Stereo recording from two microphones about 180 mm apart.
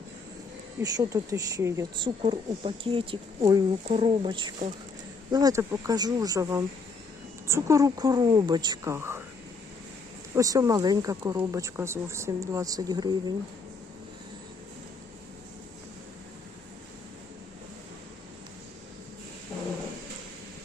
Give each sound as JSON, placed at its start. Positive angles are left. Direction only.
{"t": 0.8, "sound": "speech", "side_deg": -20}
{"t": 10.3, "sound": "speech", "side_deg": -20}